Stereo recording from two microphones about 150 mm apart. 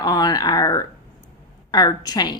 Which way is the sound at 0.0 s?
25° left (ahead or behind).